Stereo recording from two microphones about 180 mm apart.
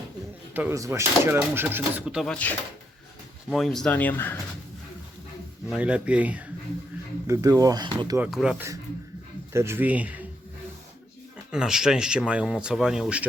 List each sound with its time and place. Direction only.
0.5 s speech: 15° right (ahead or behind); by 4.4 s 10° left (ahead or behind)
5.7 s speech: 5° right (ahead or behind)
7.3 s speech: 20° right (ahead or behind)
8.2 s speech: 5° right (ahead or behind)
9.5 s speech: 15° right (ahead or behind)
11.5 s speech: 5° right (ahead or behind)